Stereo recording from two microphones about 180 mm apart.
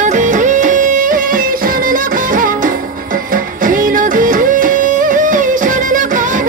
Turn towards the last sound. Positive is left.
turn(degrees=-45)  # may be behind; listen again after turning